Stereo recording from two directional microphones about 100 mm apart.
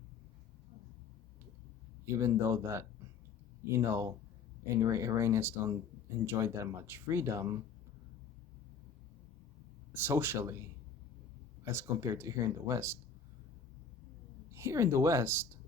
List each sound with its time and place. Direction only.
2.1 s speech: 30° right (ahead or behind)
9.9 s speech: 20° right (ahead or behind)
14.5 s speech: 30° right (ahead or behind)